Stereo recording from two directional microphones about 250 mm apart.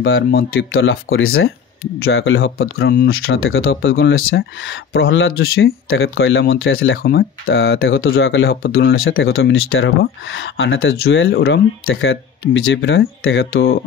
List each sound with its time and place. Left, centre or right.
0.0 s speech: left